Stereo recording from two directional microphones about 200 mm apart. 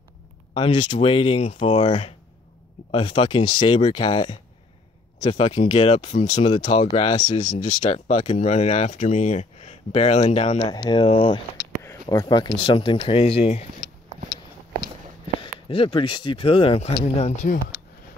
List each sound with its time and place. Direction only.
0.6 s speech: 25° left (ahead or behind)
5.8 s speech: 35° left (ahead or behind)
6.9 s speech: 20° left (ahead or behind)
7.5 s speech: 35° left (ahead or behind)
15.7 s speech: 25° left (ahead or behind)